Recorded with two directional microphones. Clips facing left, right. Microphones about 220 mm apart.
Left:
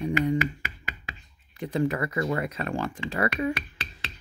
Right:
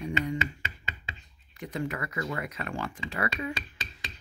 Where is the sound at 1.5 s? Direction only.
30° left (ahead or behind).